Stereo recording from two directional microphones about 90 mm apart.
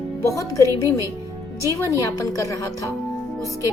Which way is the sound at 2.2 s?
40° left (ahead or behind).